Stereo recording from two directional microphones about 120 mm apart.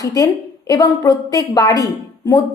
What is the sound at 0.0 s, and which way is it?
A woman's voice, 30° left (ahead or behind).